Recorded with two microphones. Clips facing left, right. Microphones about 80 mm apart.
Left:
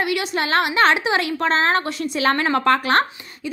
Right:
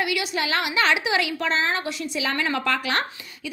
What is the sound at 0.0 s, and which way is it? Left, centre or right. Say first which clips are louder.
A woman's voice: left 3 dB; left.